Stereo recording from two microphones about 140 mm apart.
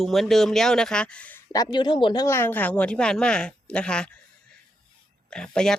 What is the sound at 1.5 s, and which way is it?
Speech, 30° left (ahead or behind).